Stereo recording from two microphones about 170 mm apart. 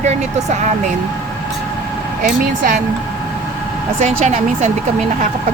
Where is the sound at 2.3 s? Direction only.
50° right (ahead or behind).